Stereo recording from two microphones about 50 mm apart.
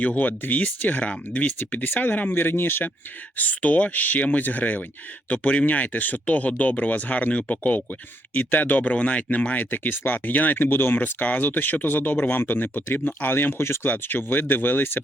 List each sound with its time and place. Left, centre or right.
0.2 s speech: left
2.3 s speech: left
3.3 s speech: left
9.7 s speech: left
11.0 s speech: left